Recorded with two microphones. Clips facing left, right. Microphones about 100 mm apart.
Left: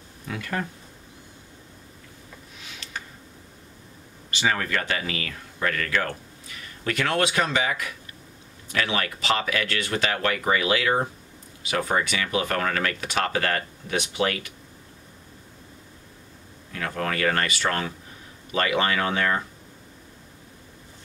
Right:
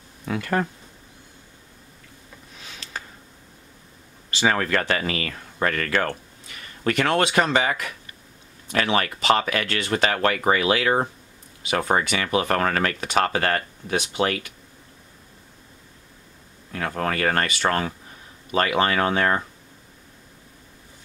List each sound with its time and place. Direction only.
0.3 s speech: 45° right (ahead or behind)
4.5 s speech: 50° right (ahead or behind)
7.1 s speech: 40° right (ahead or behind)
8.7 s speech: 40° right (ahead or behind)
16.7 s speech: 35° right (ahead or behind)